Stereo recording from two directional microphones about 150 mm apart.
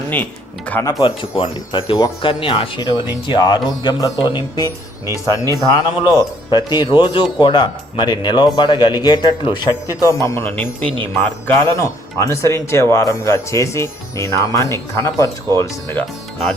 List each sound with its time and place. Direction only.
0.7 s speech: 15° left (ahead or behind)
1.0 s speech: 35° left (ahead or behind)
10.0 s speech: 20° left (ahead or behind)